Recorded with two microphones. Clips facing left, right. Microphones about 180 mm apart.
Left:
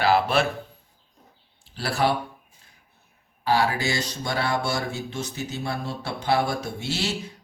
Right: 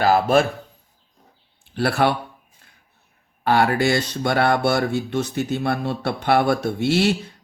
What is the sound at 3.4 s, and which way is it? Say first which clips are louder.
Speech: right 5 dB; 60° right (ahead or behind).